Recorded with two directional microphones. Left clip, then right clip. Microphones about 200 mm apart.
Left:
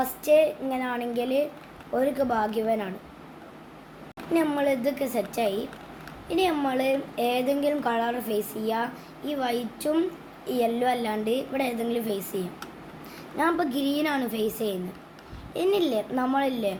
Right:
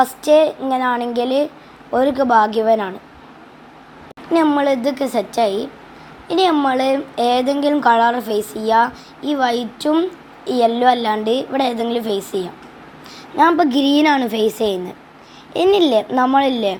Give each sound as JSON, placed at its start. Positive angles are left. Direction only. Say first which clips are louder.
{"t": 0.0, "sound": "speech", "louder": "right 8 dB", "side_deg": -30}
{"t": 4.4, "sound": "a woman's voice", "louder": "right 9 dB", "side_deg": -30}